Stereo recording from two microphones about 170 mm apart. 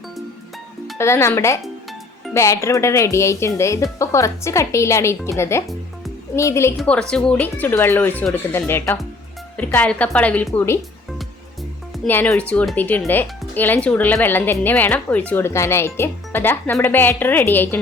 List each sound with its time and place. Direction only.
0.9 s speech: 15° left (ahead or behind)
12.0 s speech: 10° left (ahead or behind)